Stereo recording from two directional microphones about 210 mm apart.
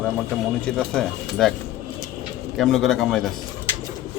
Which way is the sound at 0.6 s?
5° left (ahead or behind).